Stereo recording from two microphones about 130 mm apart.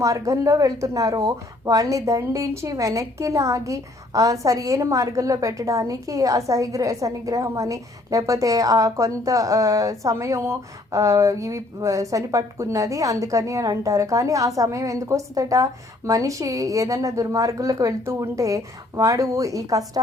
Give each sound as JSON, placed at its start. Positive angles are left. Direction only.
{"t": 0.0, "sound": "a woman's voice", "side_deg": -25}